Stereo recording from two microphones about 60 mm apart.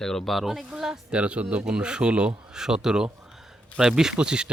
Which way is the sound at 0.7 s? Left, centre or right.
Centre.